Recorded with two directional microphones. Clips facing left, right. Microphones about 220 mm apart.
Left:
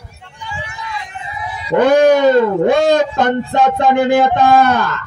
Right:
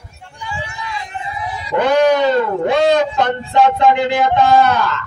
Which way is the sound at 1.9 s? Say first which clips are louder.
Left 3 dB; 50° left (ahead or behind).